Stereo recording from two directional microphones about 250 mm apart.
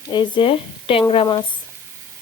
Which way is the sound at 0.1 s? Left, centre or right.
Centre.